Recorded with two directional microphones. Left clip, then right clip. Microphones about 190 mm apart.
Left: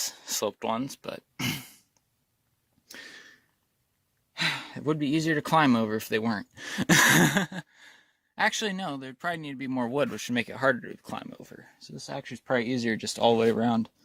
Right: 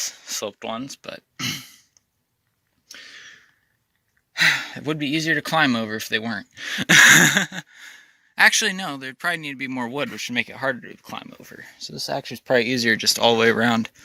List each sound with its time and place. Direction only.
0.0 s a sound: 30° left (ahead or behind)
4.4 s speech: 15° left (ahead or behind); by 11.3 s 30° left (ahead or behind)
11.3 s speech: 15° left (ahead or behind)
11.5 s speech: 10° right (ahead or behind)
11.9 s speech: 25° right (ahead or behind)